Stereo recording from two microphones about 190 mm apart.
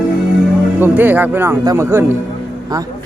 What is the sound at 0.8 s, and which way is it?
Speech, 10° right (ahead or behind).